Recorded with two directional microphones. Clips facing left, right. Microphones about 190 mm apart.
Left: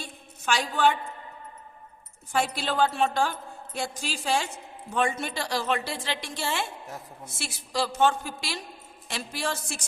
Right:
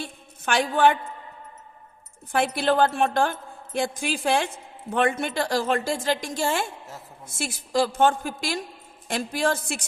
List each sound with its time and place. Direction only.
0.0 s a woman's voice: 55° right (ahead or behind)
2.3 s a woman's voice: 55° right (ahead or behind)